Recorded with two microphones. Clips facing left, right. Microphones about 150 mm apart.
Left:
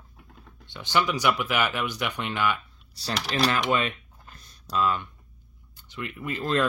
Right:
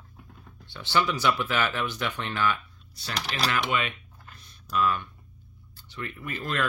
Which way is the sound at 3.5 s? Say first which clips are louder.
Left 2 dB; 40° left (ahead or behind).